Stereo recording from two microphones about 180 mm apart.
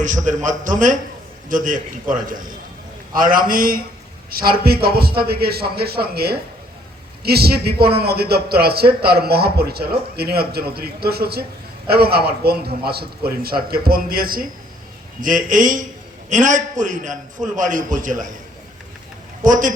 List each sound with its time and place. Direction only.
0.0 s a man's voice: 45° right (ahead or behind)
19.5 s a man's voice: 45° right (ahead or behind)